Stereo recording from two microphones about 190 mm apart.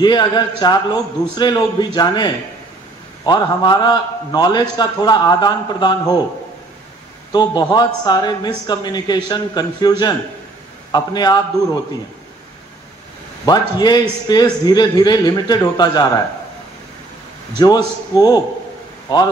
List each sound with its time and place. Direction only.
0.0 s a man's voice: 20° left (ahead or behind)
7.3 s a man's voice: 20° left (ahead or behind)
13.5 s a man's voice: 20° left (ahead or behind)
17.6 s a man's voice: 20° left (ahead or behind)